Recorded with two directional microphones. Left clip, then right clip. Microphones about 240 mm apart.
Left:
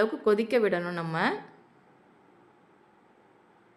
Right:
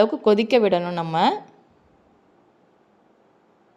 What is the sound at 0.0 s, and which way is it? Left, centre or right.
A woman's voice, centre.